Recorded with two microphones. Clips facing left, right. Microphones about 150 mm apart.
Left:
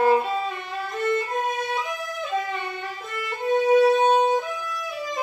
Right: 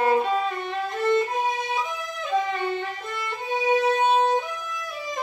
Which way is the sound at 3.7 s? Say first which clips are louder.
Left 4 dB; 5° left (ahead or behind).